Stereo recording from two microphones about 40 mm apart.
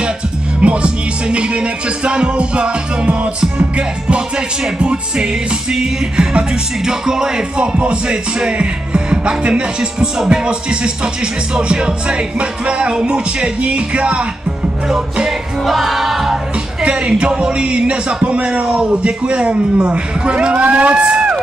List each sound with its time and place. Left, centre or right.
0.6 s music: right
15.2 s music: centre
16.8 s music: right